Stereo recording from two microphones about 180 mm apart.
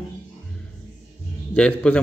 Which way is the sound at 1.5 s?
5° left (ahead or behind).